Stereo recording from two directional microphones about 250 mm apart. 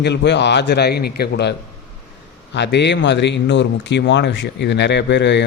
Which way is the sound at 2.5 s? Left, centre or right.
Left.